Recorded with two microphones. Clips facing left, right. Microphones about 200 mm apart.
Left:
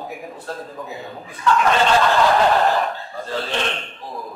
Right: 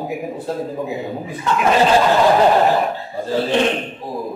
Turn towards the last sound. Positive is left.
turn(degrees=-15)  # may be behind; listen again after turning